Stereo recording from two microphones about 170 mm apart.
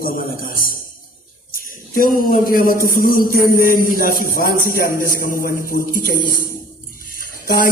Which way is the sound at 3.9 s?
55° left (ahead or behind).